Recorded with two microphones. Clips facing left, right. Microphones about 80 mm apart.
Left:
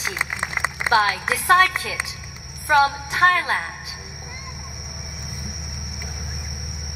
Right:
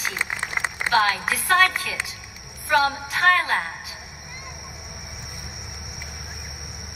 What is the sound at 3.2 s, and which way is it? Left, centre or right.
Speech, left.